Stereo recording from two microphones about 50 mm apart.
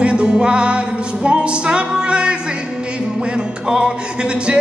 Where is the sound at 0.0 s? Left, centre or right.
Centre.